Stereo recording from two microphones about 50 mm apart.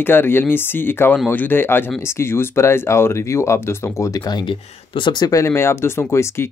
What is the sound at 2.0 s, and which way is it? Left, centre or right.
Speech, left.